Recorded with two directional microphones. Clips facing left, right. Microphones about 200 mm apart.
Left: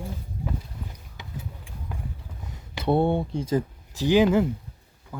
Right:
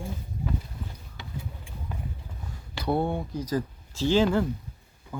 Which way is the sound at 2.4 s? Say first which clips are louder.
Left 4 dB; 20° left (ahead or behind).